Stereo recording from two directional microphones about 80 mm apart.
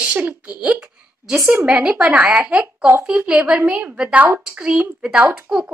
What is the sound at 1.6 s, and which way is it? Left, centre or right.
A woman's voice, centre.